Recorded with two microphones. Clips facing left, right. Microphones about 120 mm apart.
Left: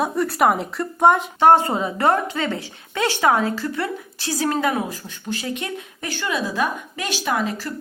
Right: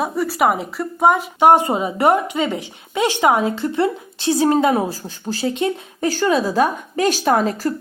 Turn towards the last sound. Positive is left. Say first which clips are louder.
# right 6 dB
turn(degrees=-40)  # may be behind; listen again after turning